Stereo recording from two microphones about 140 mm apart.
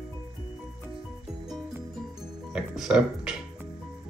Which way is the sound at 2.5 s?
5° right (ahead or behind).